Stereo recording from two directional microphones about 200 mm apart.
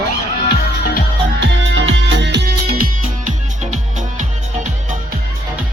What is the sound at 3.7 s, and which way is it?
Music, 40° right (ahead or behind).